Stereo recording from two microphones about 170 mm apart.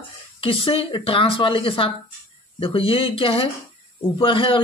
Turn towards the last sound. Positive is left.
turn(degrees=30)  # may be behind; listen again after turning